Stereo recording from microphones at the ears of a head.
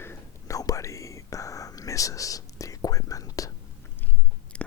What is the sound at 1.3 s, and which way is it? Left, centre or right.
Whispering, left.